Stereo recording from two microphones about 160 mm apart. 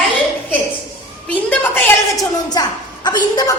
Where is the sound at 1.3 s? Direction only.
10° left (ahead or behind).